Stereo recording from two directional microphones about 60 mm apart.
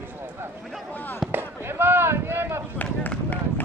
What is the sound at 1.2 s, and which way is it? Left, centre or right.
Speech, right.